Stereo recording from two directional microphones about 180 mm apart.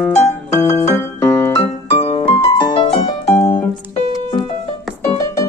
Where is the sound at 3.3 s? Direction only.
10° left (ahead or behind).